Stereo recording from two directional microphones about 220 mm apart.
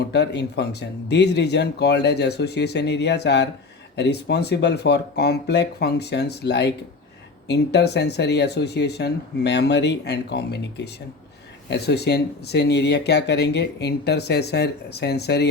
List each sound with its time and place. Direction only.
0.1 s speech: 50° left (ahead or behind)